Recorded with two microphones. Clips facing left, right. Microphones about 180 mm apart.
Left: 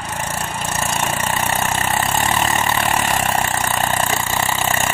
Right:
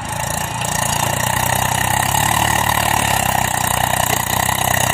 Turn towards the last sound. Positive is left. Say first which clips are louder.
# right 2 dB
turn(degrees=-35)  # may be behind; listen again after turning